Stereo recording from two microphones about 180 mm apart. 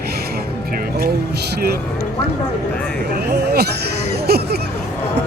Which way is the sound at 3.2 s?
60° right (ahead or behind).